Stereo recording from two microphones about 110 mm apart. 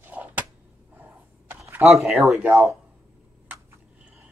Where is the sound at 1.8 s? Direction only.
Centre (ahead or behind).